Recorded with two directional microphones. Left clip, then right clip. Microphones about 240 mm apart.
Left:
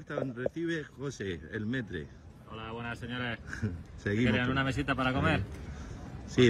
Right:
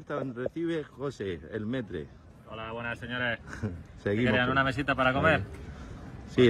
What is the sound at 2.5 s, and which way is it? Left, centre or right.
Speech, centre.